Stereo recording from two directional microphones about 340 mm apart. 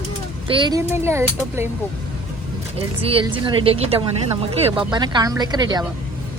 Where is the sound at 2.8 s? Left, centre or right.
Centre.